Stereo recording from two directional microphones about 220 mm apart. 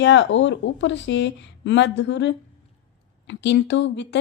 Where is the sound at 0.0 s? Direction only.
55° left (ahead or behind).